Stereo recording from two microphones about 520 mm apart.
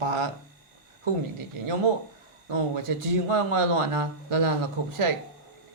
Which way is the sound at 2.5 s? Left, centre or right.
Right.